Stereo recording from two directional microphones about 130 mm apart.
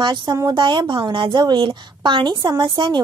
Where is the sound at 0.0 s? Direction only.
35° right (ahead or behind).